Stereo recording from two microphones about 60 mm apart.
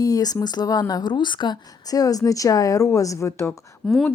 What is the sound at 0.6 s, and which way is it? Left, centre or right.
Speech, left.